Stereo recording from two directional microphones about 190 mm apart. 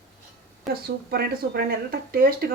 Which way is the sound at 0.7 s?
55° right (ahead or behind).